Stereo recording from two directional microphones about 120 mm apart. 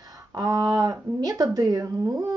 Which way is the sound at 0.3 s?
30° right (ahead or behind).